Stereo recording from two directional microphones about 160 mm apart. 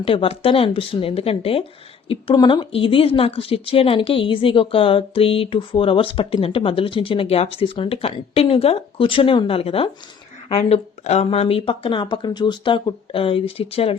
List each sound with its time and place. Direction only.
0.0 s speech: 35° left (ahead or behind)